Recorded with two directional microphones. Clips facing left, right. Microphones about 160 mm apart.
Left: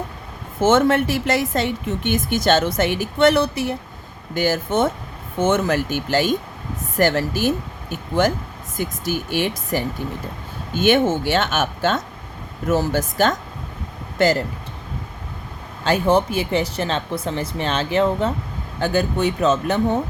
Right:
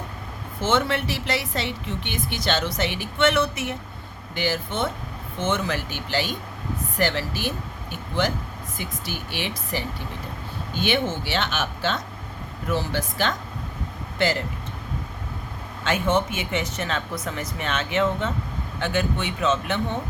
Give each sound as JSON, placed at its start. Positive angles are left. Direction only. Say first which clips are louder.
{"t": 0.6, "sound": "speech", "louder": "left 8 dB", "side_deg": 45}
{"t": 4.4, "sound": "speech", "louder": "left 7 dB", "side_deg": 45}
{"t": 15.8, "sound": "speech", "louder": "left 5 dB", "side_deg": 35}